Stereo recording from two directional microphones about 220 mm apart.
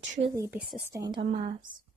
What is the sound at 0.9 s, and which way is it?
Speech, 20° right (ahead or behind).